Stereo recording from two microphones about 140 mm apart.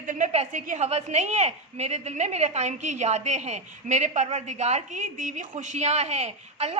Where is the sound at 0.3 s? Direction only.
55° right (ahead or behind).